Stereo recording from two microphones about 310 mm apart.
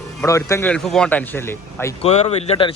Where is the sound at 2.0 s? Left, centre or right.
Centre.